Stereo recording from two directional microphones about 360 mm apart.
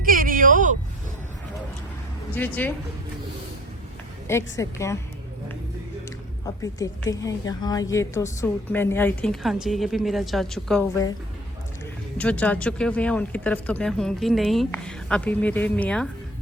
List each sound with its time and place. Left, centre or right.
0.0 s a sound: right
4.3 s a woman's voice: centre
6.4 s a woman's voice: centre
12.1 s a woman's voice: centre